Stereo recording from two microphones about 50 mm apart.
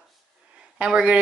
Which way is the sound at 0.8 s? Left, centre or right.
Centre.